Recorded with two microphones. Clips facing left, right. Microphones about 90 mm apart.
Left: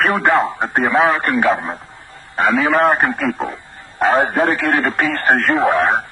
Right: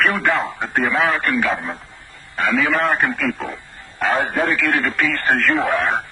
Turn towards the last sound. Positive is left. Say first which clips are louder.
# left 4 dB
turn(degrees=35)  # may be behind; listen again after turning